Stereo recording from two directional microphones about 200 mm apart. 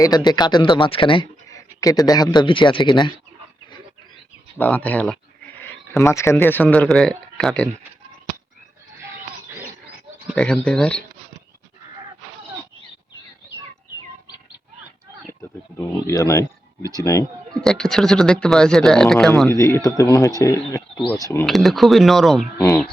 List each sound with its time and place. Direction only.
0.0 s speech: 20° left (ahead or behind)
4.5 s speech: 10° left (ahead or behind)
10.3 s speech: 5° left (ahead or behind)
16.0 s speech: 15° left (ahead or behind)
17.5 s speech: 5° left (ahead or behind)
19.5 s speech: 15° left (ahead or behind)
21.4 s speech: centre (ahead or behind)